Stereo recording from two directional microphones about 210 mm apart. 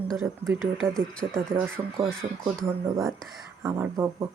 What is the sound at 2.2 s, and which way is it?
Speech, 30° right (ahead or behind).